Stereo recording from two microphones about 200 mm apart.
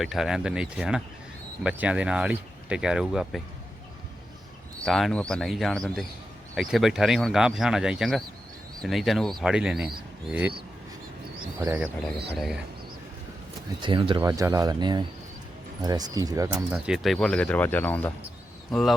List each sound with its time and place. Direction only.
0.0 s speech: centre (ahead or behind)
4.9 s speech: centre (ahead or behind)
11.6 s speech: 15° right (ahead or behind)
13.8 s speech: 25° right (ahead or behind)
16.7 s speech: 5° right (ahead or behind)